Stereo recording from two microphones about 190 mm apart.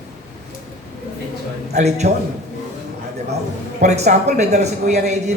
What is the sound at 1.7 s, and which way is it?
Speech, 35° right (ahead or behind).